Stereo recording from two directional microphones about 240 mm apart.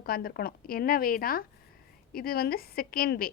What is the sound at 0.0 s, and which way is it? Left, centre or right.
A woman's voice, left.